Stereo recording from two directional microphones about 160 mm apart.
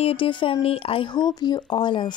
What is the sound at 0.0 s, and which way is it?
Speech, 35° left (ahead or behind).